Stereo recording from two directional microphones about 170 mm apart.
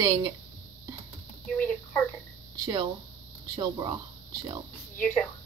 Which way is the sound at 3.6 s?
25° right (ahead or behind).